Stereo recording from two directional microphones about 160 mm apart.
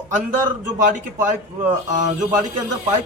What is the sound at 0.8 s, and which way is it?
A man's voice, 50° right (ahead or behind).